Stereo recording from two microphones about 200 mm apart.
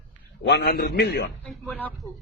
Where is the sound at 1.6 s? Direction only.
10° left (ahead or behind).